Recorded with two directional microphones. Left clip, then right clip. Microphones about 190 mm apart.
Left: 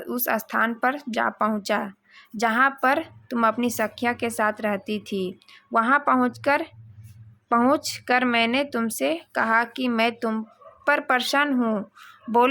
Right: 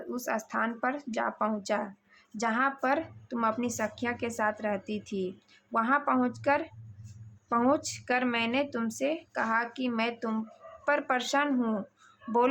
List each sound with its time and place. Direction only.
0.0 s speech: 20° left (ahead or behind)